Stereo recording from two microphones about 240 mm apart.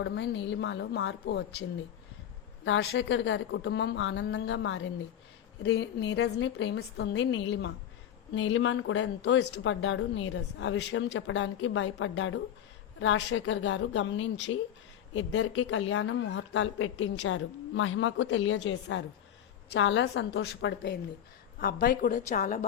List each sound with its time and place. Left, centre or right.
0.0 s speech: left
2.6 s a woman's voice: left